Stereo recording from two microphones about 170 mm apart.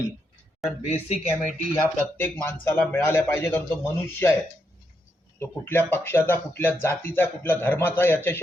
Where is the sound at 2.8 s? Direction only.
10° left (ahead or behind).